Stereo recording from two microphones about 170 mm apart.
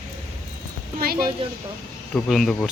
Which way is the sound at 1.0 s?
60° right (ahead or behind).